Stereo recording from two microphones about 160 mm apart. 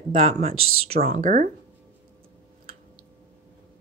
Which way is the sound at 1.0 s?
60° right (ahead or behind).